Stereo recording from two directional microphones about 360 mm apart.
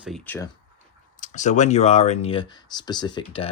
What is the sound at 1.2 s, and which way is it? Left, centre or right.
Speech, centre.